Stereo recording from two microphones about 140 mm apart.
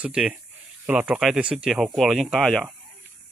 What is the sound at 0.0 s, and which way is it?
Speech, 5° right (ahead or behind).